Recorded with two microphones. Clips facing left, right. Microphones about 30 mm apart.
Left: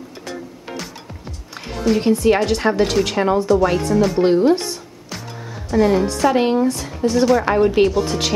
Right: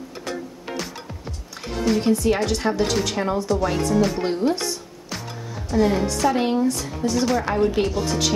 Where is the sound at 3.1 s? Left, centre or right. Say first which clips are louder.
Left 6 dB; left.